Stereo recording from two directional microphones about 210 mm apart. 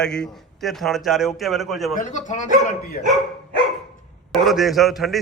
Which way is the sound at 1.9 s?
35° left (ahead or behind).